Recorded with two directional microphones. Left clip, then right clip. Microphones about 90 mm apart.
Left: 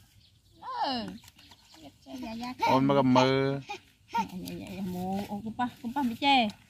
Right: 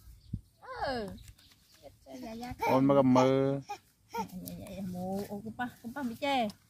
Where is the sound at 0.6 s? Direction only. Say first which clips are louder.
Left 4 dB; 40° right (ahead or behind).